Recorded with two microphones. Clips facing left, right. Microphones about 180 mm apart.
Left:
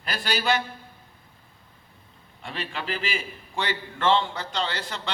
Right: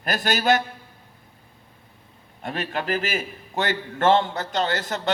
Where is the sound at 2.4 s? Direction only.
45° right (ahead or behind).